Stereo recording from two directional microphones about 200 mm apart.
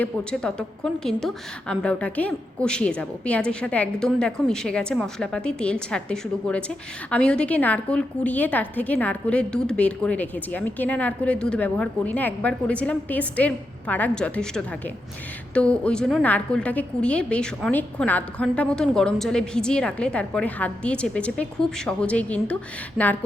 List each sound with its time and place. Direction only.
0.0 s a woman's voice: 5° left (ahead or behind)